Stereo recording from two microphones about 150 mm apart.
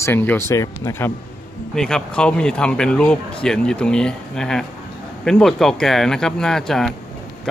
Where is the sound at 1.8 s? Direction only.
5° left (ahead or behind).